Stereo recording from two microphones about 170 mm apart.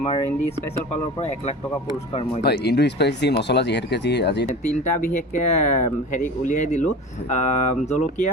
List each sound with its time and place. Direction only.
2.4 s speech: 75° left (ahead or behind)
4.9 s speech: 45° left (ahead or behind)